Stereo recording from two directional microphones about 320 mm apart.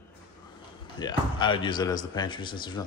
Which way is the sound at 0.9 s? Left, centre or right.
Centre.